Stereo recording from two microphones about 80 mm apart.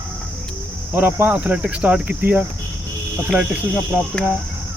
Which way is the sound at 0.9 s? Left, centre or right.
Right.